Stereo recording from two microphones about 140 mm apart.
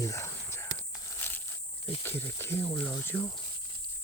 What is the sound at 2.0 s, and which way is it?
Speech, 15° left (ahead or behind).